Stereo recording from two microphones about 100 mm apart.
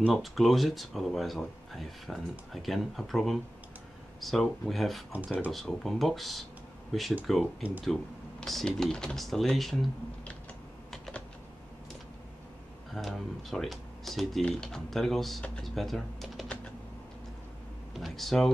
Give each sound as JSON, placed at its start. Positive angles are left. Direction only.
{"t": 0.1, "sound": "speech", "side_deg": 0}
{"t": 5.1, "sound": "speech", "side_deg": -15}
{"t": 5.5, "sound": "speech", "side_deg": 0}
{"t": 10.9, "sound": "typing", "side_deg": 5}
{"t": 12.9, "sound": "speech", "side_deg": 0}
{"t": 17.9, "sound": "speech", "side_deg": 0}